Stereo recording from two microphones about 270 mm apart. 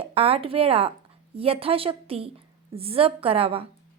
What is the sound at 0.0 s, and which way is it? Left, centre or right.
A woman's voice, right.